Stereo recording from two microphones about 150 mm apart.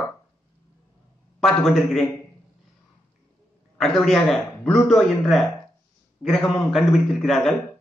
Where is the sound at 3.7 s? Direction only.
Centre (ahead or behind).